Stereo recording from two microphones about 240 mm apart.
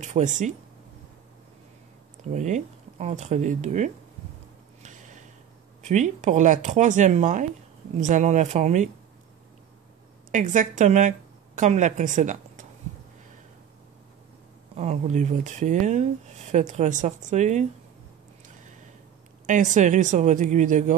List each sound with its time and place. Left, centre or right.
0.0 s speech: right
2.3 s speech: right
4.8 s a sound: right
5.8 s speech: right
10.3 s a woman's voice: right
14.8 s speech: right
19.4 s speech: right